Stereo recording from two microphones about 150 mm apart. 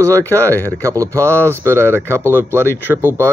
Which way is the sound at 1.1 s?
10° left (ahead or behind).